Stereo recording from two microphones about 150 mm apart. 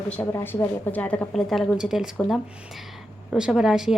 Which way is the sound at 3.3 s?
5° right (ahead or behind).